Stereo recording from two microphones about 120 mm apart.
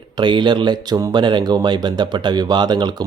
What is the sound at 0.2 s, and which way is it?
Speech, 40° right (ahead or behind).